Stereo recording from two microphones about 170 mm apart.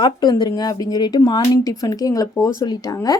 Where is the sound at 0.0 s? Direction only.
25° left (ahead or behind).